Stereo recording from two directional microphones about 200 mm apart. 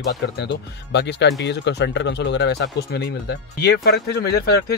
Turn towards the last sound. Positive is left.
turn(degrees=50)  # may be behind; listen again after turning